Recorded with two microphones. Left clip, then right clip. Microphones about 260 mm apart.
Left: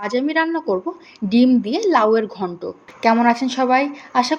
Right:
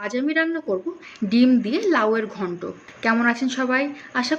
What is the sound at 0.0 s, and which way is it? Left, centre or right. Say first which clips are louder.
A woman's voice: left 3 dB; centre.